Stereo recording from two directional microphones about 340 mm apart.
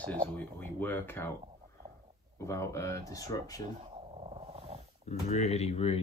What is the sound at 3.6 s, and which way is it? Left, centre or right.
Purr, centre.